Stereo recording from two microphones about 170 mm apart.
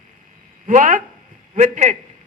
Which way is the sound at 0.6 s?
50° right (ahead or behind).